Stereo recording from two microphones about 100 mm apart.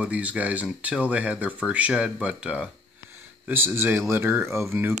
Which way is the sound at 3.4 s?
20° right (ahead or behind).